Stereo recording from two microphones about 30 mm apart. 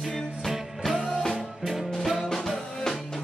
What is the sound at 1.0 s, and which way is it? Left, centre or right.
Music, centre.